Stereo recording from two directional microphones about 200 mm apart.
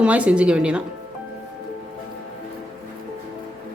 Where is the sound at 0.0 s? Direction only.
5° right (ahead or behind).